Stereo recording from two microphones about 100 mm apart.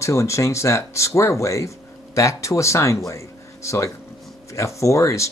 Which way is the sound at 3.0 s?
30° left (ahead or behind).